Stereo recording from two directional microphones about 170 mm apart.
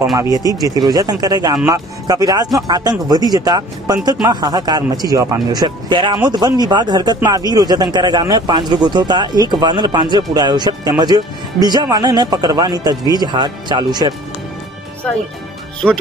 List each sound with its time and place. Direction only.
0.1 s speech: 20° right (ahead or behind)